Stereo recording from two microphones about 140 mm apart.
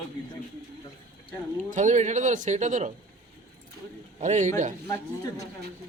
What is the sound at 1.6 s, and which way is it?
Speech, 60° right (ahead or behind).